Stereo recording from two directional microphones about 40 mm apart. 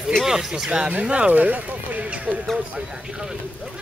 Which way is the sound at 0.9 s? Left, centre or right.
Right.